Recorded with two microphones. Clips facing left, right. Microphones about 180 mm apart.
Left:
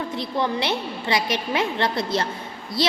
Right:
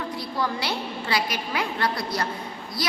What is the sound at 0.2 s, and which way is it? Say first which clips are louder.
A woman's voice: left 5 dB; 20° left (ahead or behind).